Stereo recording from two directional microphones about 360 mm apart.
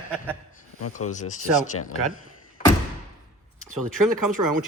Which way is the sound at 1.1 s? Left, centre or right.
Centre.